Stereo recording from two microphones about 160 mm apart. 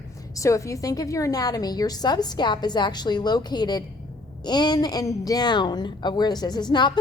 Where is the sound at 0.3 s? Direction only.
20° left (ahead or behind).